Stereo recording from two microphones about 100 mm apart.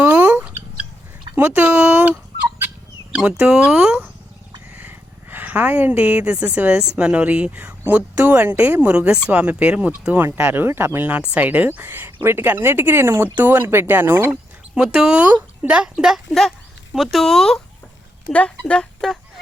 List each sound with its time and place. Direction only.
0.0 s a sound: 15° right (ahead or behind)
1.4 s fowl: 15° right (ahead or behind)
3.1 s speech: 10° right (ahead or behind)
4.7 s speech: 20° right (ahead or behind)
14.8 s a child's voice: 5° right (ahead or behind)